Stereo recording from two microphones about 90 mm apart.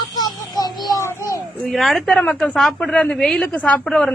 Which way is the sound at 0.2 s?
45° left (ahead or behind).